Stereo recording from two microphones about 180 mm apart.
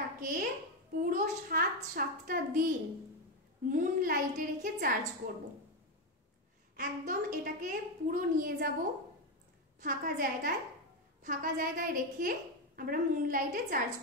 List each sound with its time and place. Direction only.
0.2 s a child's voice: 50° right (ahead or behind)
6.8 s a woman's voice: 50° right (ahead or behind)
9.8 s a woman's voice: 50° right (ahead or behind)